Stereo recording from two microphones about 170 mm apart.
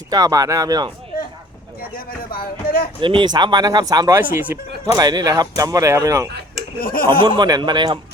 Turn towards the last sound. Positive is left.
turn(degrees=-25)  # may be behind; listen again after turning